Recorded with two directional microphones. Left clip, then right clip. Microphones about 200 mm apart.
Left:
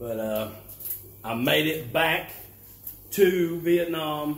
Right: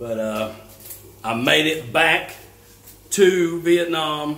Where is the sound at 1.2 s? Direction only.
10° right (ahead or behind).